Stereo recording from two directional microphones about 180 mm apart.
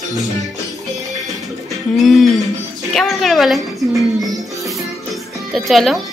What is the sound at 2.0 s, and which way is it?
A woman's voice, centre (ahead or behind).